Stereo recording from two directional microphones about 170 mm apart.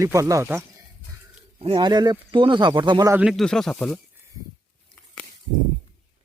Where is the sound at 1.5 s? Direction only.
30° right (ahead or behind).